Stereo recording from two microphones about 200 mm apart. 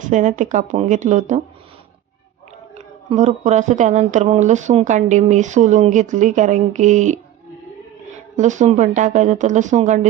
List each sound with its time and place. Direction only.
0.0 s speech: 40° right (ahead or behind)
2.7 s speech: 35° right (ahead or behind)
8.4 s speech: 35° right (ahead or behind)